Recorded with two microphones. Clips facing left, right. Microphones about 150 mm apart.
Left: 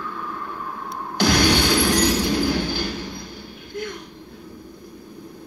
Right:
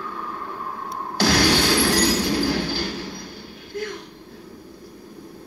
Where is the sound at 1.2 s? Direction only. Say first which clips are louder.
Left 1 dB; 35° right (ahead or behind).